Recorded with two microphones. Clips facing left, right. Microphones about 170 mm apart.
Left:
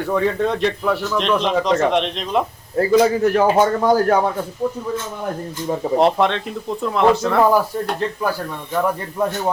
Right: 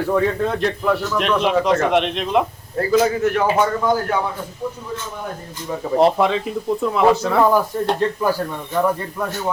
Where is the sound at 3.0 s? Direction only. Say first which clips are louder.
Left 2 dB; 30° left (ahead or behind).